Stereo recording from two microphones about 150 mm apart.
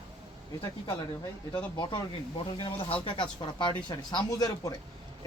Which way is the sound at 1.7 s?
30° left (ahead or behind).